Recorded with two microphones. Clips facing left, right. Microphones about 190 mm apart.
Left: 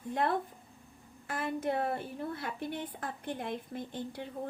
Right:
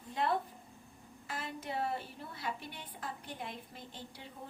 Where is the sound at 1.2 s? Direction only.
55° left (ahead or behind).